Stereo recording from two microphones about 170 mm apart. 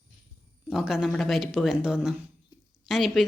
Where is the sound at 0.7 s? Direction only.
Centre (ahead or behind).